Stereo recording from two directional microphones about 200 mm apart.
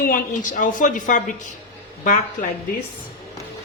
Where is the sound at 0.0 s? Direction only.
45° left (ahead or behind).